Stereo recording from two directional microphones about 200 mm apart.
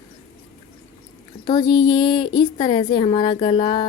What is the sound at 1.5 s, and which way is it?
A woman's voice, 20° left (ahead or behind).